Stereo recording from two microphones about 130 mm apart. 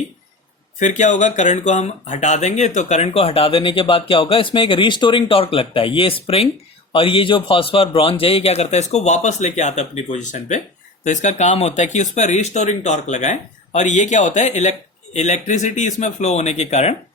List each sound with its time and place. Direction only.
0.8 s speech: 70° left (ahead or behind)
3.1 s a man's voice: 50° left (ahead or behind)